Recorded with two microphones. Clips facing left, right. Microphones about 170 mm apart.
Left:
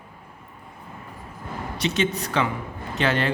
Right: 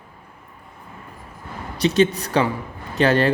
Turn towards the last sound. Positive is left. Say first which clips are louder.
# right 6 dB
turn(degrees=-40)  # may be behind; listen again after turning